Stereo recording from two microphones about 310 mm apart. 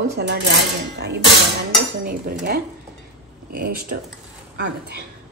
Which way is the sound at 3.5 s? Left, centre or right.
Right.